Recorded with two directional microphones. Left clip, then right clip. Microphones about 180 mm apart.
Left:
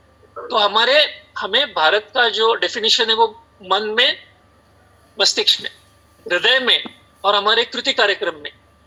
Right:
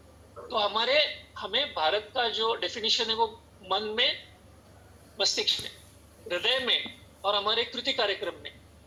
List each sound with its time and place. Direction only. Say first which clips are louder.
0.3 s a man's voice: left 12 dB; 40° left (ahead or behind)